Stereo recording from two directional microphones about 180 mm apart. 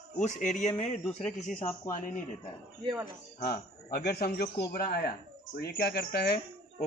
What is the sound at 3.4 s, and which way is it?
A man's voice, 60° left (ahead or behind).